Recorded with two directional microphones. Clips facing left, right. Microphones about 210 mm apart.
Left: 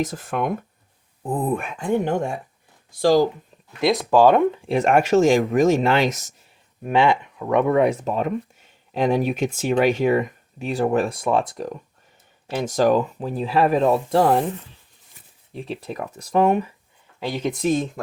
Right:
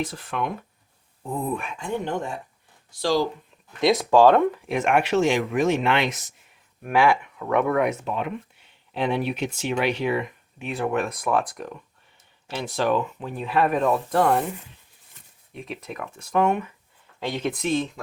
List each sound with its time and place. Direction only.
0.0 s speech: 45° left (ahead or behind)
3.7 s speech: 5° left (ahead or behind)
4.5 s speech: 30° left (ahead or behind)
6.8 s speech: 20° left (ahead or behind)
7.8 s speech: 35° left (ahead or behind)
15.5 s speech: 30° left (ahead or behind)
17.2 s speech: 10° left (ahead or behind)
17.7 s speech: 45° left (ahead or behind)